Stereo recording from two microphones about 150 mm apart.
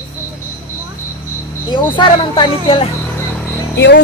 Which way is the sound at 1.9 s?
35° left (ahead or behind).